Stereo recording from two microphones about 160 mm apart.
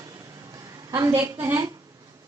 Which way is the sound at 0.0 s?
20° right (ahead or behind).